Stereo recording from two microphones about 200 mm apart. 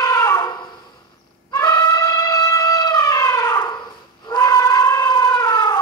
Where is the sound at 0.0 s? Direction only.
15° left (ahead or behind).